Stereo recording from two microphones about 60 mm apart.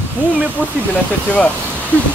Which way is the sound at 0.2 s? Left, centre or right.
Right.